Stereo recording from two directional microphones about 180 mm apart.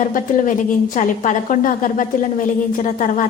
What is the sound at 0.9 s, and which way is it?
A woman's voice, 45° left (ahead or behind).